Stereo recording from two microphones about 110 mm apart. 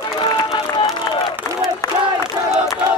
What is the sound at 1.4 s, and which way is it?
Crowd, 35° left (ahead or behind).